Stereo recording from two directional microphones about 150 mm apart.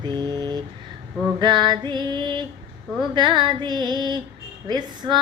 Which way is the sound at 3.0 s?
30° right (ahead or behind).